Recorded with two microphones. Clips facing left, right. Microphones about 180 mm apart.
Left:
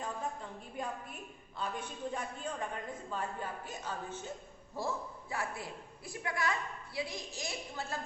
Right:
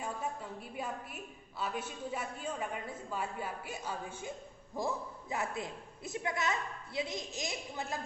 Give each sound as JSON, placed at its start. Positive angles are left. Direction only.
{"t": 0.0, "sound": "a woman's voice", "side_deg": -10}